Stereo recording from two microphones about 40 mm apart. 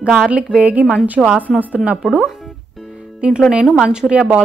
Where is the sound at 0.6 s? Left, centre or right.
Right.